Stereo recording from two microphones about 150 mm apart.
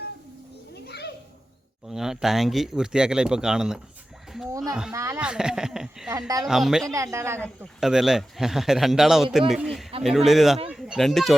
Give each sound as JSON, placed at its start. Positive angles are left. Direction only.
{"t": 0.7, "sound": "children playing", "side_deg": 90}
{"t": 1.9, "sound": "speech", "side_deg": -5}
{"t": 4.9, "sound": "a woman's voice", "side_deg": -20}
{"t": 5.2, "sound": "speech", "side_deg": -5}
{"t": 6.1, "sound": "a woman's voice", "side_deg": -25}
{"t": 6.5, "sound": "speech", "side_deg": -5}
{"t": 6.9, "sound": "a woman's voice", "side_deg": -20}
{"t": 7.3, "sound": "speech", "side_deg": 10}
{"t": 7.8, "sound": "speech", "side_deg": -5}